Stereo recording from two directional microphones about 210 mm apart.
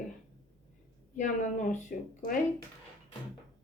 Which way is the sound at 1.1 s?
35° left (ahead or behind).